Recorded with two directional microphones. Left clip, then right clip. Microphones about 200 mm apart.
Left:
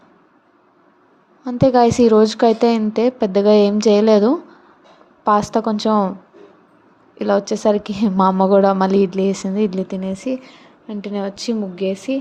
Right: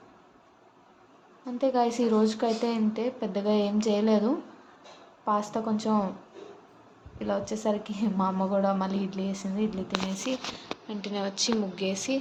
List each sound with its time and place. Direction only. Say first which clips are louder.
1.5 s a woman's voice: left 12 dB; 40° left (ahead or behind)
7.2 s a woman's voice: left 13 dB; 40° left (ahead or behind)